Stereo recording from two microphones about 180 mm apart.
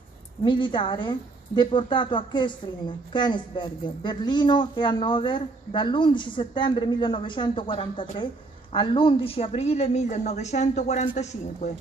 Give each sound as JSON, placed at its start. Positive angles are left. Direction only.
{"t": 0.4, "sound": "a woman's voice", "side_deg": 25}